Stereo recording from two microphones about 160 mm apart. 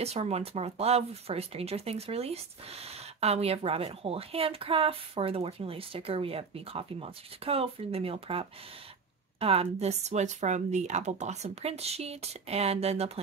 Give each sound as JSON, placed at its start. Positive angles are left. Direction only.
{"t": 0.0, "sound": "speech", "side_deg": -40}